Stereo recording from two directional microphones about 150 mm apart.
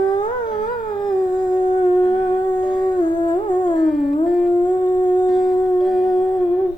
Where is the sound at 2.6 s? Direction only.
30° left (ahead or behind).